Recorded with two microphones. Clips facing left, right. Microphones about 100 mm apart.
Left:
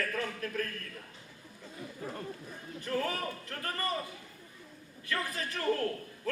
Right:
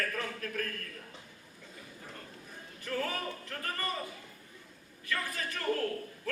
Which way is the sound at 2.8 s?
35° left (ahead or behind).